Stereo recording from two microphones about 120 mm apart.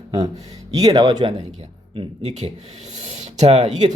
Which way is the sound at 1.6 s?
65° right (ahead or behind).